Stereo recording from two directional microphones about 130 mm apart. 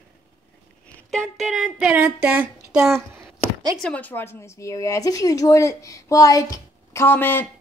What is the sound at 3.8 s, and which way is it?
Speech, 10° left (ahead or behind).